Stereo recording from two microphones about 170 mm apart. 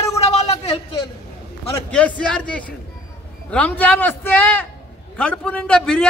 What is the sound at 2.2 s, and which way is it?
A man's voice, 5° left (ahead or behind).